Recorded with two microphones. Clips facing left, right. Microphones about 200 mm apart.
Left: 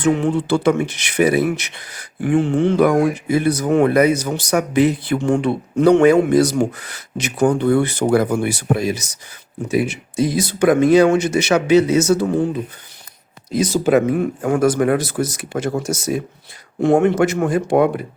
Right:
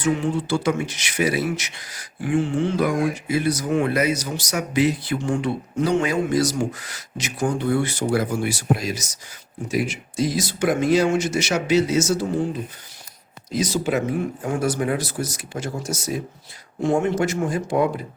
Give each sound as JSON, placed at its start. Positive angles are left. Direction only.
{"t": 0.0, "sound": "speech", "side_deg": 60}
{"t": 13.5, "sound": "speech", "side_deg": 55}